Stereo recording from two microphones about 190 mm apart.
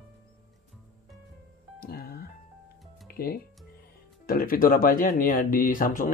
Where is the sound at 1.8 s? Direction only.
55° left (ahead or behind).